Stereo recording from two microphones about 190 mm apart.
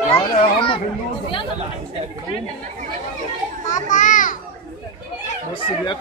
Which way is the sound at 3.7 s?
40° left (ahead or behind).